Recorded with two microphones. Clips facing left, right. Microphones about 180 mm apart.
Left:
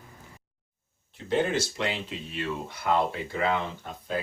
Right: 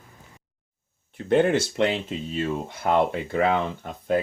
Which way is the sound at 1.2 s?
55° right (ahead or behind).